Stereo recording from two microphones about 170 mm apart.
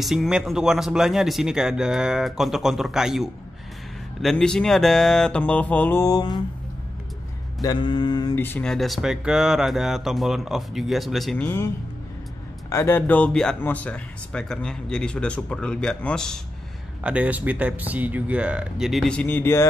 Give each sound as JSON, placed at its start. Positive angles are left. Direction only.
{"t": 0.0, "sound": "speech", "side_deg": 0}
{"t": 7.6, "sound": "mantra", "side_deg": 30}
{"t": 8.4, "sound": "speech", "side_deg": 10}
{"t": 11.4, "sound": "a man's voice", "side_deg": 15}
{"t": 17.0, "sound": "speech", "side_deg": -10}